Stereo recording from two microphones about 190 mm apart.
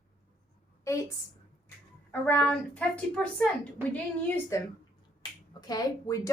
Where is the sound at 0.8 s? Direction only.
15° left (ahead or behind).